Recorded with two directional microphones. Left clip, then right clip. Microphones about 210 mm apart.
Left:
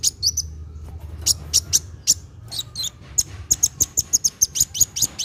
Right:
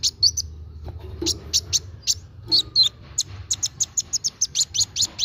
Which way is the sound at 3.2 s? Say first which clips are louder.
Left 4 dB; 15° right (ahead or behind).